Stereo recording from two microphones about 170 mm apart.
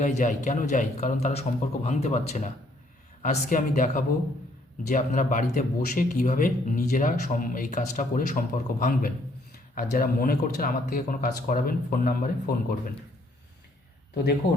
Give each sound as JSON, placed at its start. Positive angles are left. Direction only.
{"t": 0.0, "sound": "a man's voice", "side_deg": 45}